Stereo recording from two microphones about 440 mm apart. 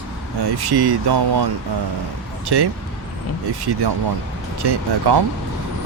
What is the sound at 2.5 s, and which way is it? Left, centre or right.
Speech, right.